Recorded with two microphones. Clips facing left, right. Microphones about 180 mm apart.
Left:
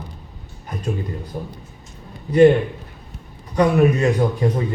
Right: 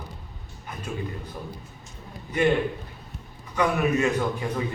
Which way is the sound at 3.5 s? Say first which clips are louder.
Left 7 dB; 35° left (ahead or behind).